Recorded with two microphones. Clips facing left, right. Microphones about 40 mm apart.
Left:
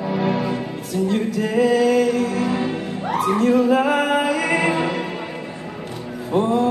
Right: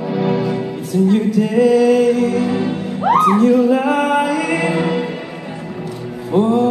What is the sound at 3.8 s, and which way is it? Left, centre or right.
Music, right.